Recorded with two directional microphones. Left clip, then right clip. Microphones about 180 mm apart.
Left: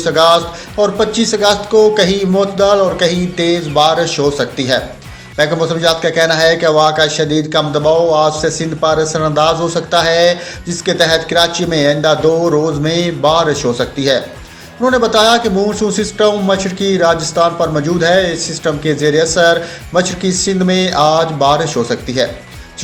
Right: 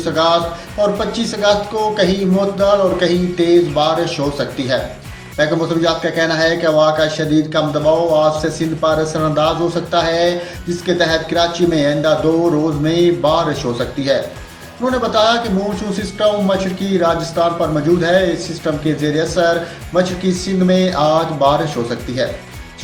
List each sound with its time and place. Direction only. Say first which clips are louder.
0.0 s a man's voice: left 4 dB; 50° left (ahead or behind)